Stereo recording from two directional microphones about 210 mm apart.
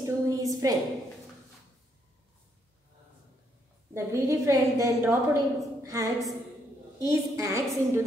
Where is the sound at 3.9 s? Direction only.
15° right (ahead or behind).